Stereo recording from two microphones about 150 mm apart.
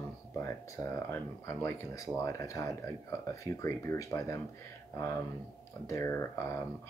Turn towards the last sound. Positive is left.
turn(degrees=20)  # may be behind; listen again after turning